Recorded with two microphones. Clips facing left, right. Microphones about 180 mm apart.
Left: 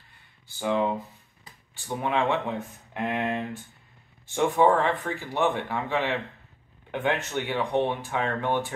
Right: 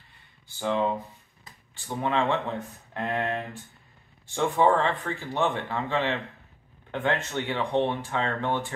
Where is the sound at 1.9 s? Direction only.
15° left (ahead or behind).